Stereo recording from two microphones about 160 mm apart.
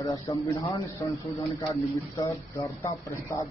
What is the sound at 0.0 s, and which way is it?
A man's voice, 20° left (ahead or behind).